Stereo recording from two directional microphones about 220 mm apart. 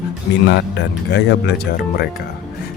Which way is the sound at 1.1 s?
50° left (ahead or behind).